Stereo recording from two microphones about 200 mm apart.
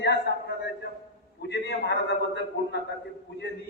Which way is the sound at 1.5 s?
55° left (ahead or behind).